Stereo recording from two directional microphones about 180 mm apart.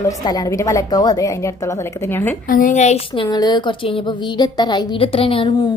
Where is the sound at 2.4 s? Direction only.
50° left (ahead or behind).